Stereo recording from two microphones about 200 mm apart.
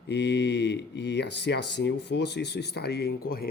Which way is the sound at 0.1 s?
60° left (ahead or behind).